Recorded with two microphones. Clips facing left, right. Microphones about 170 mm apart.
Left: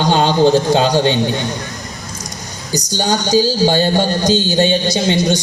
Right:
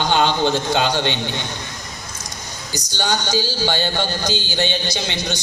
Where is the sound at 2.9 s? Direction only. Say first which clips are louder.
Left 7 dB; 35° left (ahead or behind).